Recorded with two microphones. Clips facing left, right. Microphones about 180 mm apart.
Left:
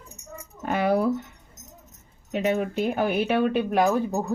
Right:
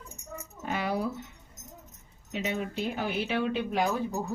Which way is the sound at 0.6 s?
55° left (ahead or behind).